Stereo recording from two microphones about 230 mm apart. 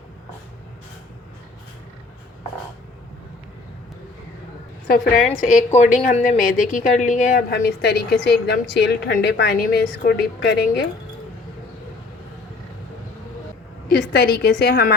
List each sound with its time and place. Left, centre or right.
5.5 s a woman's voice: left
13.8 s a woman's voice: left